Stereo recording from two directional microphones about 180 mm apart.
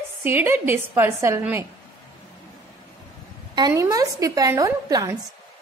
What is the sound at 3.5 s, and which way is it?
A woman's voice, 20° right (ahead or behind).